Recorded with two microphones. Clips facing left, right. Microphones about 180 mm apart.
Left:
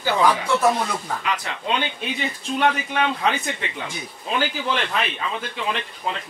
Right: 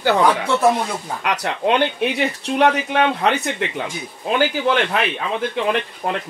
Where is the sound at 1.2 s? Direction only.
70° right (ahead or behind).